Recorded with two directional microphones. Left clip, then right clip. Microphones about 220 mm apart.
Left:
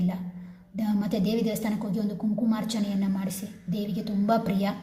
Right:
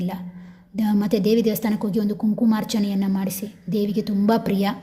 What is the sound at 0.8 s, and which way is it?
A woman's voice, 50° right (ahead or behind).